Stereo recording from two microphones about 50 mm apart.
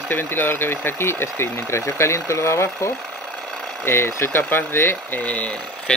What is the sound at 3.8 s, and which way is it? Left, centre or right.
Speech, left.